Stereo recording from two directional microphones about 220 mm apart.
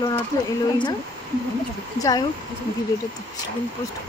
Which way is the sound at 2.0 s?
15° left (ahead or behind).